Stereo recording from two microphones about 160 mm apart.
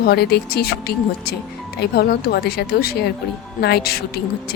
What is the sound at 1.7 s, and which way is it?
A woman's voice, 90° left.